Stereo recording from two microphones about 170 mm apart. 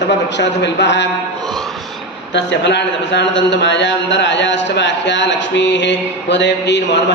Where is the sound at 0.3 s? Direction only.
90° left.